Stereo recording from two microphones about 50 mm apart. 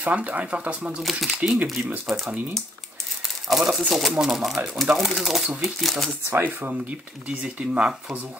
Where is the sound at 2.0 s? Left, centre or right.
Centre.